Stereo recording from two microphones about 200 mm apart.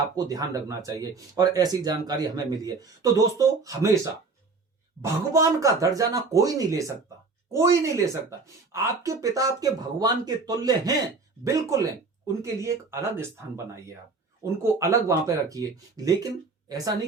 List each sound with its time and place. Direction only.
0.2 s speech: 15° right (ahead or behind)
5.3 s speech: 15° right (ahead or behind)